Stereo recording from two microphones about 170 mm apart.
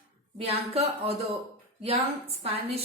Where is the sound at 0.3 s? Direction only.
35° right (ahead or behind).